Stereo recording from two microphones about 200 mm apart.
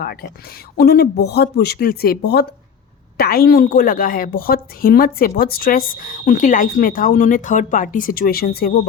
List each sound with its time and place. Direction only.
0.0 s speech: 50° left (ahead or behind)